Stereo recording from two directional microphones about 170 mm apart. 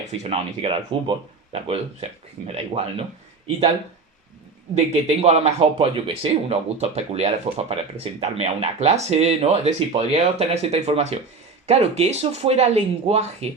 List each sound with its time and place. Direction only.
0.0 s speech: 40° right (ahead or behind)
4.7 s speech: 40° right (ahead or behind)